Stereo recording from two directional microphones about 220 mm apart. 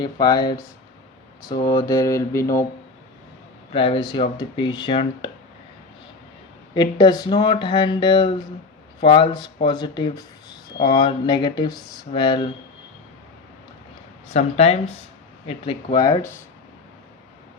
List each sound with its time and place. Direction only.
0.0 s speech: 20° left (ahead or behind)
3.7 s speech: 25° left (ahead or behind)
6.7 s speech: 20° left (ahead or behind)
14.3 s speech: 30° left (ahead or behind)
15.9 s speech: 20° left (ahead or behind)